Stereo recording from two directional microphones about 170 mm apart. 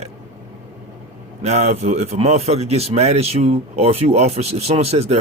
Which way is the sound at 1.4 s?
40° right (ahead or behind).